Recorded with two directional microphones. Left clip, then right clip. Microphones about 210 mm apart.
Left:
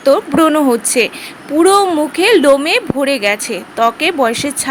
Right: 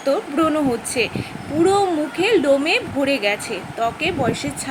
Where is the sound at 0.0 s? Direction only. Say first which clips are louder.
Left 8 dB; 45° left (ahead or behind).